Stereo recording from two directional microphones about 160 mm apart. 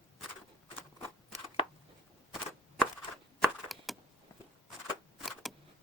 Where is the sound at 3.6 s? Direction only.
Centre (ahead or behind).